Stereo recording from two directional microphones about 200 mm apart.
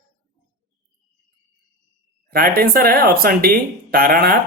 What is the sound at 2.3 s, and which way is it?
Speech, 50° right (ahead or behind).